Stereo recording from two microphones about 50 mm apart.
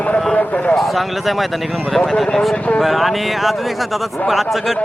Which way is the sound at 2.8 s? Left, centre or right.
Centre.